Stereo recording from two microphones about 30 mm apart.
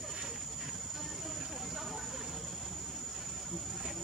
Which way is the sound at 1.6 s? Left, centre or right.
Centre.